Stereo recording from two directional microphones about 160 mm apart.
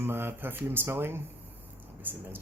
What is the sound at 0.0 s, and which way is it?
Speech, 15° right (ahead or behind).